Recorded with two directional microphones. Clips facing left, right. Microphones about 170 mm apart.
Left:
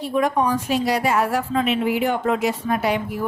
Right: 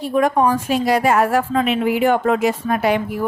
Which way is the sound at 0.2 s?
50° right (ahead or behind).